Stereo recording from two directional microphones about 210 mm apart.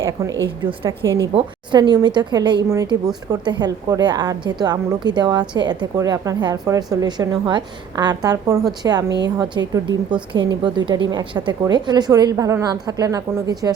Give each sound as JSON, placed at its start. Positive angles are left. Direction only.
{"t": 0.4, "sound": "a woman's voice", "side_deg": -25}